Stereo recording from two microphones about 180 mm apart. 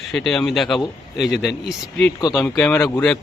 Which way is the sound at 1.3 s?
65° left (ahead or behind).